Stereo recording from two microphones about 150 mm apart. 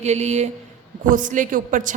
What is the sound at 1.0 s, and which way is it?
Speech, 60° right (ahead or behind).